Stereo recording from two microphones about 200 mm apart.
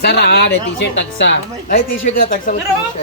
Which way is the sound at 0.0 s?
55° left (ahead or behind).